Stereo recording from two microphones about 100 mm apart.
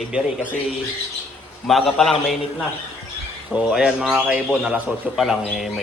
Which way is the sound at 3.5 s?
5° right (ahead or behind).